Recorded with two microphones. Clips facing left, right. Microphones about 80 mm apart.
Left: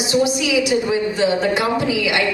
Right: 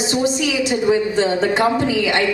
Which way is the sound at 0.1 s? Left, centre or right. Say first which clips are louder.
Left 4 dB; right.